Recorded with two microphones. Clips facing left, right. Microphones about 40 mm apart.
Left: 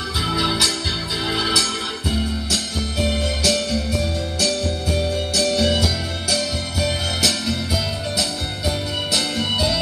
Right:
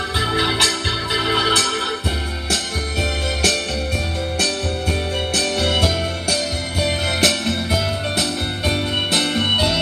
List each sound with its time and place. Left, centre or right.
0.3 s organ: right
2.5 s music: right